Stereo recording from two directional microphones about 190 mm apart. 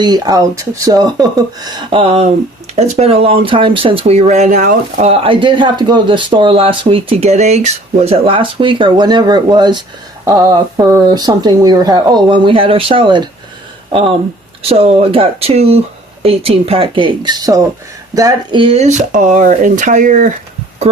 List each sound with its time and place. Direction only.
0.0 s speech: 20° right (ahead or behind); by 20.3 s 45° right (ahead or behind)